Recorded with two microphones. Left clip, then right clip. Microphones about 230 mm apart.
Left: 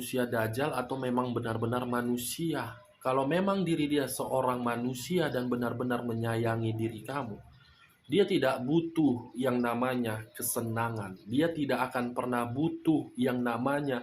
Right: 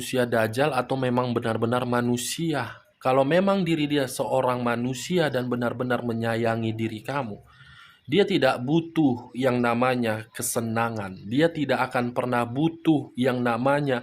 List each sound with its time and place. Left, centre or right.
0.0 s speech: right